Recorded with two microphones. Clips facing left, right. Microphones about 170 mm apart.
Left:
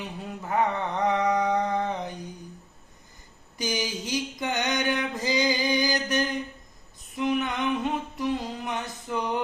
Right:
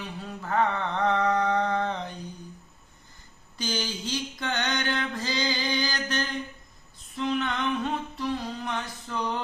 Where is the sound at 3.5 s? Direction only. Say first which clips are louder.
Left 2 dB; 15° left (ahead or behind).